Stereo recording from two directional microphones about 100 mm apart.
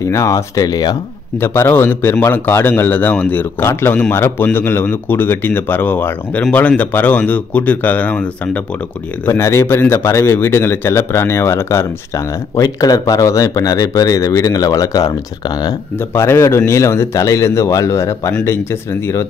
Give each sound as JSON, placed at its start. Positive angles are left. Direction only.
{"t": 0.0, "sound": "speech", "side_deg": 35}
{"t": 1.4, "sound": "a man's voice", "side_deg": 25}
{"t": 12.5, "sound": "speech", "side_deg": 40}
{"t": 16.2, "sound": "a man's voice", "side_deg": 25}